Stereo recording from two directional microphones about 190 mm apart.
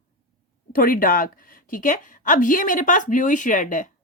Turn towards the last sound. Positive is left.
turn(degrees=45)  # may be behind; listen again after turning